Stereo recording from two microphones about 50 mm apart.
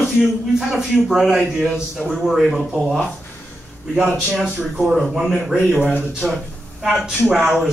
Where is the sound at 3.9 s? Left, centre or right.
Centre.